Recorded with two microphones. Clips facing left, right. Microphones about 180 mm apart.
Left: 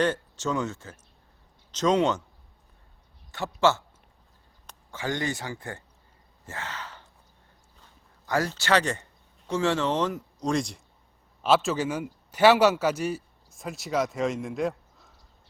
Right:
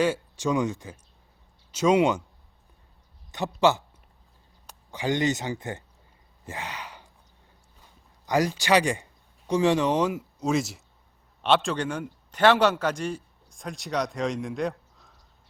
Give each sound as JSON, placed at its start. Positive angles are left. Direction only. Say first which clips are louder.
{"t": 0.0, "sound": "speech", "louder": "right 1 dB", "side_deg": -10}
{"t": 3.3, "sound": "speech", "louder": "right 1 dB", "side_deg": -15}
{"t": 6.4, "sound": "sigh", "louder": "right 1 dB", "side_deg": -15}
{"t": 8.3, "sound": "a man's voice", "louder": "right 2 dB", "side_deg": -15}